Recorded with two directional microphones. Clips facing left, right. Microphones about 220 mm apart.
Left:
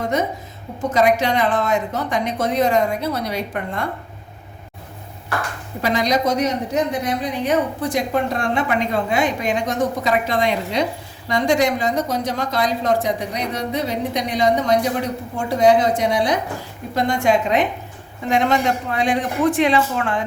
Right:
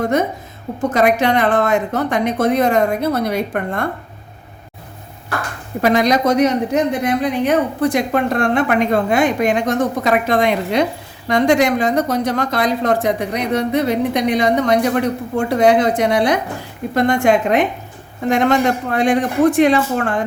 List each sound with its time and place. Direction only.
0.0 s a woman's voice: 55° right (ahead or behind)
5.8 s a woman's voice: 55° right (ahead or behind)